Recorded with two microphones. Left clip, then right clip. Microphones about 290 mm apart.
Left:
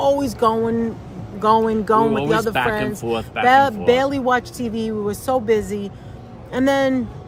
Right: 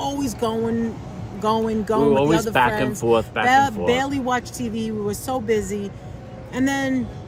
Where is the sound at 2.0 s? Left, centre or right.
Centre.